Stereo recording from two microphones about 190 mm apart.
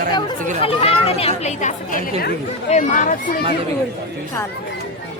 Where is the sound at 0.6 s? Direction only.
30° left (ahead or behind).